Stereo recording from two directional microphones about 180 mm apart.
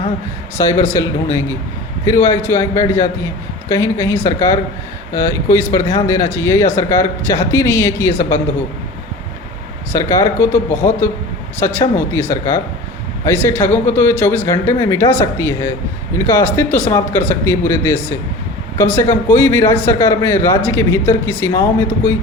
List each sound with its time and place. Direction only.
0.6 s a man's voice: 15° left (ahead or behind)
10.0 s a man's voice: 15° left (ahead or behind)